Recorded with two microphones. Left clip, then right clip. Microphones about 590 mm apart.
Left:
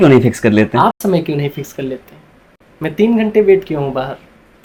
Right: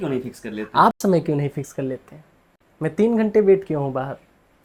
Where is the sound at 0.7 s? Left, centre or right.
Right.